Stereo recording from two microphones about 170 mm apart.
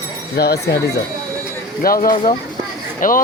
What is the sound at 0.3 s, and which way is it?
Speech, 70° left (ahead or behind).